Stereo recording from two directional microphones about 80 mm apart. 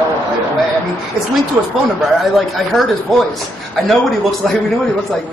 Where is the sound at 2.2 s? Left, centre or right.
Centre.